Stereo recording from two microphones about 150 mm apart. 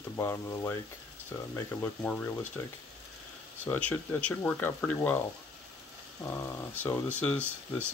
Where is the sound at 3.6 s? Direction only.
15° left (ahead or behind).